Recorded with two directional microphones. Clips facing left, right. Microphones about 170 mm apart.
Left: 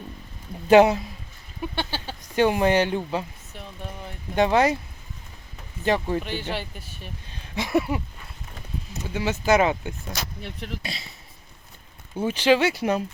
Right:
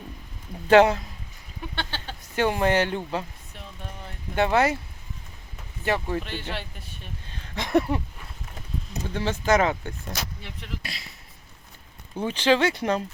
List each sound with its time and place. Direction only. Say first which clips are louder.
0.7 s speech: left 2 dB; 15° left (ahead or behind)
4.4 s speech: left 2 dB; 15° left (ahead or behind)
5.8 s speech: left 3 dB; 20° left (ahead or behind)
6.2 s speech: left 4 dB; centre (ahead or behind)
7.3 s speech: right 1 dB; 15° left (ahead or behind)
9.0 s speech: left 2 dB; 10° left (ahead or behind)
10.8 s speech: left 4 dB; 25° left (ahead or behind)
12.1 s speech: left 2 dB; 10° left (ahead or behind)